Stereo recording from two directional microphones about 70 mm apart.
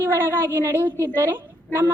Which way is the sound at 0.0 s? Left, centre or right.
Right.